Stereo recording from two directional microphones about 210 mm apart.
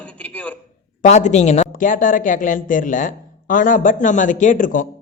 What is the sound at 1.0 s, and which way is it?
Speech, 35° left (ahead or behind).